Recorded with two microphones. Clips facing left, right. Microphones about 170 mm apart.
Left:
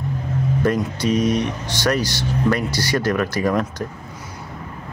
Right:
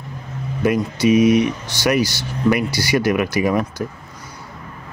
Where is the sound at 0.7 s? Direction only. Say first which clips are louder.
Right 6 dB; 10° right (ahead or behind).